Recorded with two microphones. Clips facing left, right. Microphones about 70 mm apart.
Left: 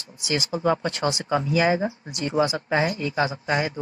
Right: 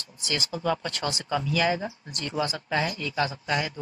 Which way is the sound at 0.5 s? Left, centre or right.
Left.